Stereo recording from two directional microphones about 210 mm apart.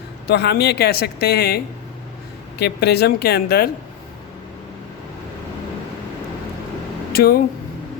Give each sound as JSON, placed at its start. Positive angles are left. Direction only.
{"t": 0.3, "sound": "a woman's voice", "side_deg": 50}
{"t": 7.1, "sound": "speech", "side_deg": 45}